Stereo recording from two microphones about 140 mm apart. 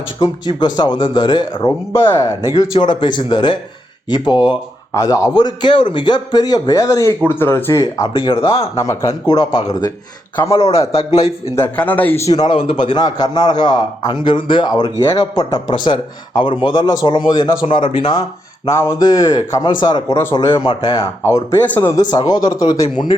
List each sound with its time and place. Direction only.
0.2 s speech: 30° left (ahead or behind)
1.9 s speech: 20° left (ahead or behind)
2.7 s speech: 35° left (ahead or behind)
8.1 s speech: 40° left (ahead or behind)
8.7 s speech: 20° left (ahead or behind)
10.6 s a man's voice: 45° left (ahead or behind)
11.5 s a man's voice: 15° left (ahead or behind)
12.5 s speech: 40° left (ahead or behind)
18.6 s speech: 20° left (ahead or behind)
21.6 s a man's voice: 15° left (ahead or behind)
22.1 s speech: 30° left (ahead or behind)